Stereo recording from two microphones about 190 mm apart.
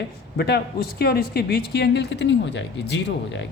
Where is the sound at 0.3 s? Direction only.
60° left (ahead or behind).